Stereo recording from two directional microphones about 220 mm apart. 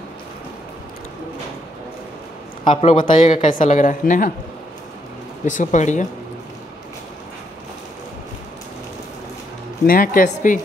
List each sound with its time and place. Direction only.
2.6 s a woman's voice: 25° left (ahead or behind)
5.4 s a woman's voice: 35° left (ahead or behind)
9.8 s a woman's voice: 40° left (ahead or behind)